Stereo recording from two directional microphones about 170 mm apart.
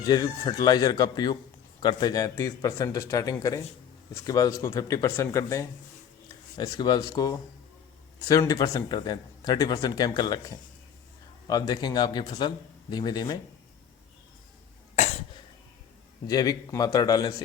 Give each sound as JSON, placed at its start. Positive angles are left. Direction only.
{"t": 0.0, "sound": "speech", "side_deg": 25}
{"t": 16.2, "sound": "speech", "side_deg": 20}